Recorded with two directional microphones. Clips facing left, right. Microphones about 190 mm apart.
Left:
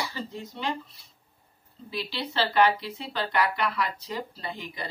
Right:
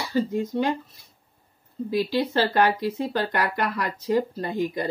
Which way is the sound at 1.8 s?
45° right (ahead or behind).